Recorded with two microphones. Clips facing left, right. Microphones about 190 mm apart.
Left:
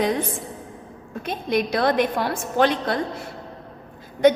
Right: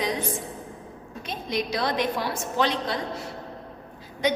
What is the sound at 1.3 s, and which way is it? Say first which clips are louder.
A woman's voice: left 6 dB; 55° left (ahead or behind).